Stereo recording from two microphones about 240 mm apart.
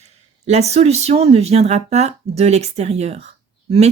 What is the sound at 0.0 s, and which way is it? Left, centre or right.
Speech, right.